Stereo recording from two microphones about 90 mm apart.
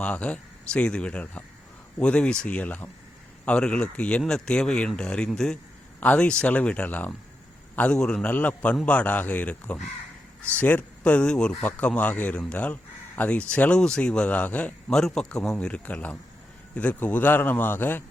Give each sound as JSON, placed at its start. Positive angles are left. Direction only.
{"t": 0.0, "sound": "speech", "side_deg": 15}
{"t": 14.8, "sound": "speech", "side_deg": 5}